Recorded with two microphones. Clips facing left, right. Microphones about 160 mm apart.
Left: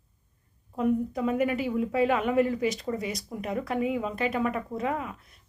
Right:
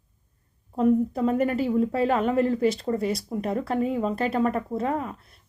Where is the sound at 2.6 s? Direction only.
30° right (ahead or behind).